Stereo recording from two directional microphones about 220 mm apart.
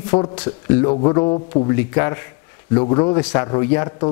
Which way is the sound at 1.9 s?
15° left (ahead or behind).